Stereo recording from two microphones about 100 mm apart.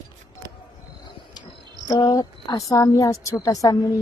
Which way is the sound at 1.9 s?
45° left (ahead or behind).